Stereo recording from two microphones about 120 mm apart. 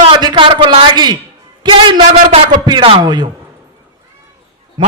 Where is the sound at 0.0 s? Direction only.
40° right (ahead or behind).